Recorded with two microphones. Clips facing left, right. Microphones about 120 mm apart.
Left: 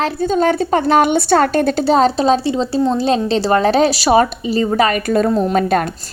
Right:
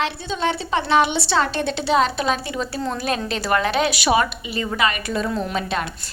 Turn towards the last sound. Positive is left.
turn(degrees=45)  # may be behind; listen again after turning